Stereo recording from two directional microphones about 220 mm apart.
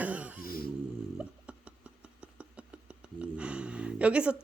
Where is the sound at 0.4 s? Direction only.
40° left (ahead or behind).